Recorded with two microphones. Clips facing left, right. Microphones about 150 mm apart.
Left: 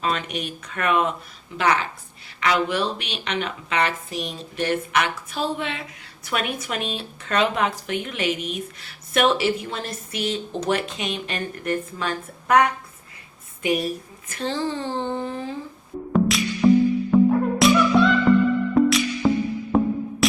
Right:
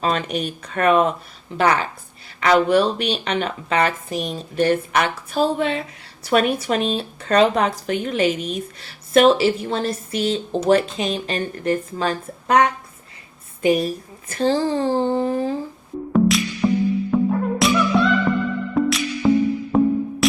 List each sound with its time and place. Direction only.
0.0 s speech: 35° right (ahead or behind)
16.1 s music: centre (ahead or behind)